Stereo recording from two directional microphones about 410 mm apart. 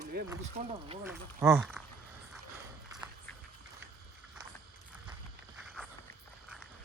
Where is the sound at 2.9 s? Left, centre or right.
Centre.